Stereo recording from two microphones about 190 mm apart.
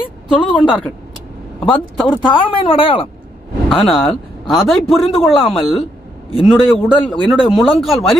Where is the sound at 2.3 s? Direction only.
25° left (ahead or behind).